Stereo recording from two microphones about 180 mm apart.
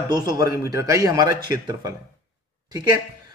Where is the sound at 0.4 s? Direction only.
20° right (ahead or behind).